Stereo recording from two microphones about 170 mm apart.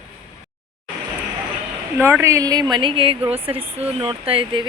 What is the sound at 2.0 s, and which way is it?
Speech, 15° right (ahead or behind).